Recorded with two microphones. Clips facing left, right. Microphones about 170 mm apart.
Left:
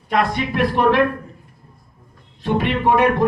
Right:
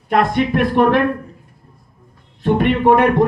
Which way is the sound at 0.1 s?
55° right (ahead or behind).